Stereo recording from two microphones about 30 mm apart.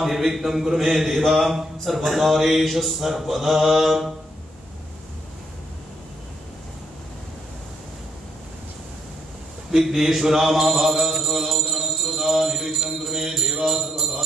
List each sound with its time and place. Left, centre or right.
0.0 s a man's voice: centre
2.6 s mantra: centre
9.7 s a man's voice: centre